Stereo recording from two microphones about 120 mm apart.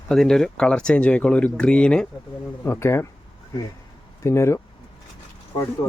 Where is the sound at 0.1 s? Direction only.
5° left (ahead or behind).